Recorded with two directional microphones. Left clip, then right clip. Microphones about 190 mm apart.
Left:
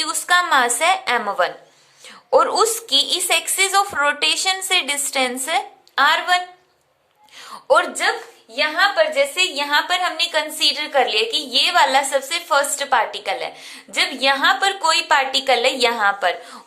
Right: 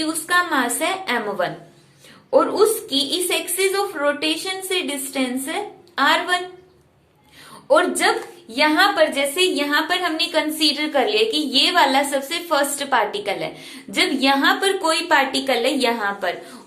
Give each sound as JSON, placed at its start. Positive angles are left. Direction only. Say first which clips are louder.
{"t": 0.0, "sound": "a woman's voice", "louder": "left 2 dB", "side_deg": 30}
{"t": 8.0, "sound": "a woman's voice", "louder": "right 1 dB", "side_deg": 15}
{"t": 8.5, "sound": "a woman's voice", "louder": "right 1 dB", "side_deg": 0}
{"t": 9.3, "sound": "a woman's voice", "louder": "left 1 dB", "side_deg": 20}